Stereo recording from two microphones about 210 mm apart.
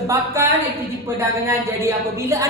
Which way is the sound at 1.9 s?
10° right (ahead or behind).